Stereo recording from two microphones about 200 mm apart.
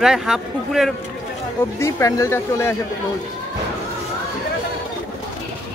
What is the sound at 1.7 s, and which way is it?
Speech, 15° left (ahead or behind).